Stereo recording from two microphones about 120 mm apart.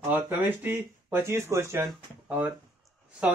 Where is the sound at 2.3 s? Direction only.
10° right (ahead or behind).